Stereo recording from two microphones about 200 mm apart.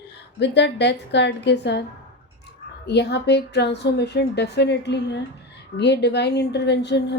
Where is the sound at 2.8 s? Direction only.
55° left (ahead or behind).